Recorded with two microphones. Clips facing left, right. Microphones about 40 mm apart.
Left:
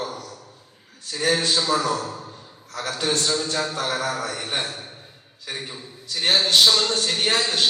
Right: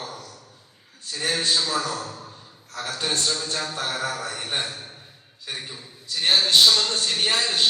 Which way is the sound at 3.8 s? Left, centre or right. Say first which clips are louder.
Left 3 dB; left.